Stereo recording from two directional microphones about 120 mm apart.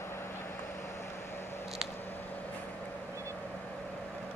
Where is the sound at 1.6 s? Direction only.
Centre (ahead or behind).